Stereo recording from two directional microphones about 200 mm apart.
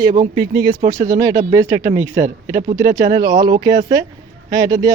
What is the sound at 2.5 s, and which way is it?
Speech, 40° right (ahead or behind).